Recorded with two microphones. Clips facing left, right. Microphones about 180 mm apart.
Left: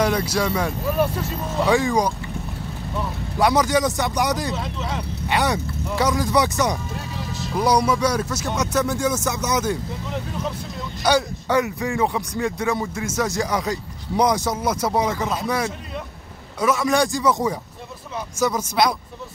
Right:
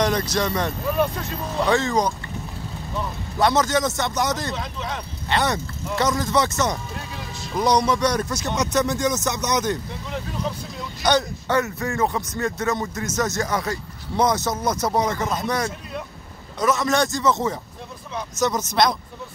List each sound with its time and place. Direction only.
0.0 s speech: 10° left (ahead or behind)
3.3 s speech: 10° left (ahead or behind)